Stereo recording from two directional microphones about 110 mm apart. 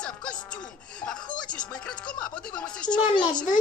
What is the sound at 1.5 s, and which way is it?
Speech, 10° left (ahead or behind).